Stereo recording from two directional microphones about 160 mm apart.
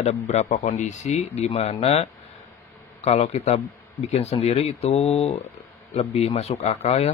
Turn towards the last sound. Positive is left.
turn(degrees=40)  # may be behind; listen again after turning